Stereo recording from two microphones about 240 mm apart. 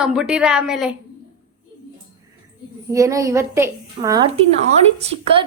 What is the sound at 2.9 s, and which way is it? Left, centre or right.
A woman's voice, centre.